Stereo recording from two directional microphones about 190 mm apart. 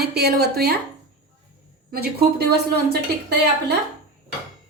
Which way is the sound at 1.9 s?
55° right (ahead or behind).